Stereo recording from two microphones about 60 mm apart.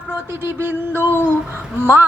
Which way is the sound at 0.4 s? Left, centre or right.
Right.